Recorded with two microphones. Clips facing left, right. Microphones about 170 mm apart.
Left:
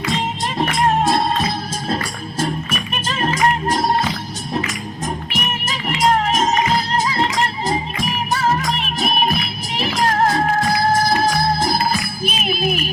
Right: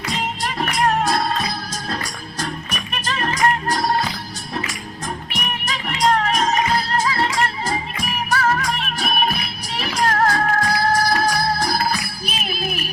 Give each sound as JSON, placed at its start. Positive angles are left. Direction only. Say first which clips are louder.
{"t": 0.0, "sound": "music", "louder": "left 3 dB", "side_deg": 25}
{"t": 5.3, "sound": "music", "louder": "left 2 dB", "side_deg": 5}
{"t": 6.3, "sound": "music", "louder": "left 2 dB", "side_deg": 20}